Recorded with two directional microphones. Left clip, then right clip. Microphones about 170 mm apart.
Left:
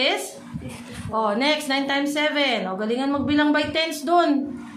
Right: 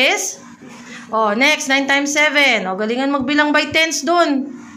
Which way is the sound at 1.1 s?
20° right (ahead or behind).